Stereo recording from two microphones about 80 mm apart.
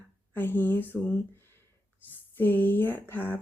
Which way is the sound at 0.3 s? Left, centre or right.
Left.